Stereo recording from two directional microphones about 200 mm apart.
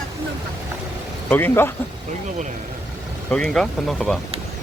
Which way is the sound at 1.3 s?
10° left (ahead or behind).